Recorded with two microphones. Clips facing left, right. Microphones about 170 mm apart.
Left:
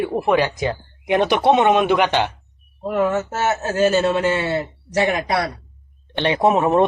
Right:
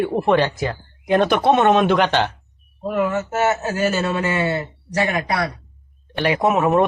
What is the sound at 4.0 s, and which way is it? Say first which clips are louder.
Speech: left 3 dB; 25° left (ahead or behind).